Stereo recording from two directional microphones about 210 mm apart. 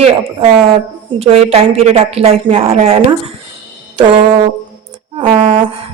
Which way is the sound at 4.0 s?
25° right (ahead or behind).